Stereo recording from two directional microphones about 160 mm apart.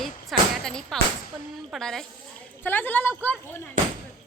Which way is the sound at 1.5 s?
Centre (ahead or behind).